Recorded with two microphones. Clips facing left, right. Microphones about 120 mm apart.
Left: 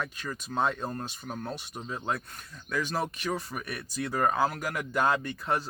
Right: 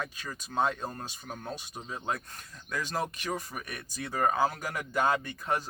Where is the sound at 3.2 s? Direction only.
15° right (ahead or behind).